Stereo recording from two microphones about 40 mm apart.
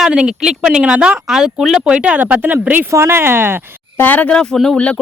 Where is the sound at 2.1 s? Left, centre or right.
Right.